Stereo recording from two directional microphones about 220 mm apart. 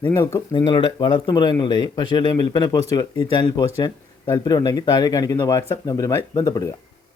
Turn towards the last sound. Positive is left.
turn(degrees=15)  # may be behind; listen again after turning